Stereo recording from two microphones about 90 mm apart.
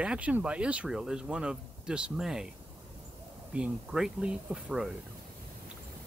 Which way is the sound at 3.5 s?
10° right (ahead or behind).